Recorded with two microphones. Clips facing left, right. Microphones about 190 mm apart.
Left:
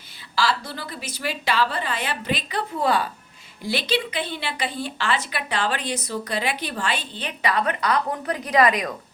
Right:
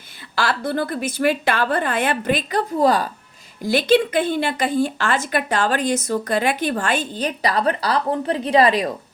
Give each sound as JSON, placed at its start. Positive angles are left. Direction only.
{"t": 0.3, "sound": "speech", "side_deg": -55}